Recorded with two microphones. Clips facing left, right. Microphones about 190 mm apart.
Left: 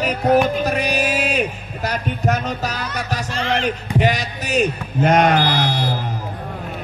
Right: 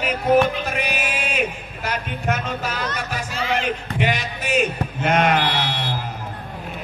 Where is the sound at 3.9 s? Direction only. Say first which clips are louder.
Left 6 dB; 40° left (ahead or behind).